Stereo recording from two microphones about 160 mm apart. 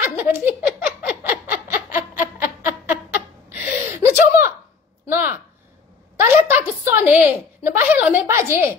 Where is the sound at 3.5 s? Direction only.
10° right (ahead or behind).